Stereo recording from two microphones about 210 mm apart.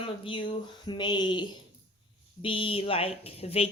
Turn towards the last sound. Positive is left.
turn(degrees=30)  # may be behind; listen again after turning